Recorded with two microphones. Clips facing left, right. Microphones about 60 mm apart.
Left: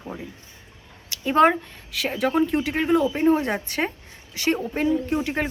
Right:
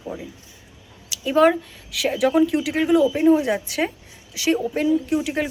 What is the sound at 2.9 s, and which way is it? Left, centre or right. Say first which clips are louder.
Speech: right 4 dB; left.